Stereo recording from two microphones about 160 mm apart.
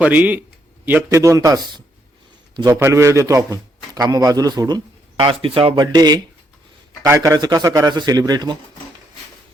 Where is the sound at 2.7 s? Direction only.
15° right (ahead or behind).